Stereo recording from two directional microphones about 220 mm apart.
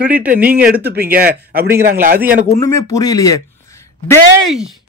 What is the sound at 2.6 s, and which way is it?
Speech, 15° left (ahead or behind).